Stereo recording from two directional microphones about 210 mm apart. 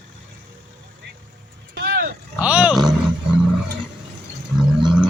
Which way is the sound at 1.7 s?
55° right (ahead or behind).